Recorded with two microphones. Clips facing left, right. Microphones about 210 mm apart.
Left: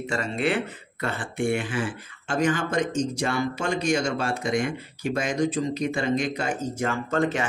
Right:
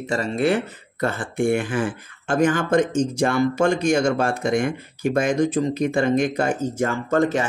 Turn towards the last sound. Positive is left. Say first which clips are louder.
# right 5 dB
turn(degrees=-40)  # may be behind; listen again after turning